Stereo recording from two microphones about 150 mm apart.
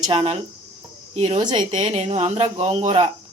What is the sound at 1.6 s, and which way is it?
A woman's voice, 50° right (ahead or behind).